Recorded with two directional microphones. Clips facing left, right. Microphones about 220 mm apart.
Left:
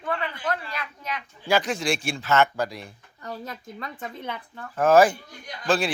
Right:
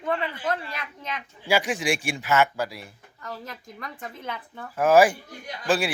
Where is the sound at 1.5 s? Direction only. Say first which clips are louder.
Even; 10° right (ahead or behind).